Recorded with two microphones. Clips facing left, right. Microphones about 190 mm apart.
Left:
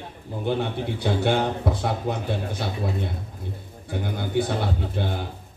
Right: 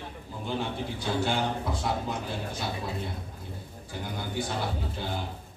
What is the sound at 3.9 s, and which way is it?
A man's voice, 60° left (ahead or behind).